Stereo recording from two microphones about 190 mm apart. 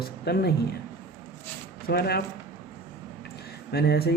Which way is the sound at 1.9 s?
55° left (ahead or behind).